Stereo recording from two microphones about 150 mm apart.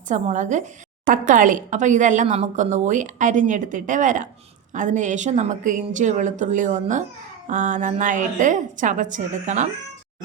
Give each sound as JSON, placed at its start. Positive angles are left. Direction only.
{"t": 0.1, "sound": "a woman's voice", "side_deg": -55}